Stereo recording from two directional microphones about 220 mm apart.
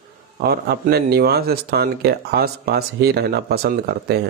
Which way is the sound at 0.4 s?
45° right (ahead or behind).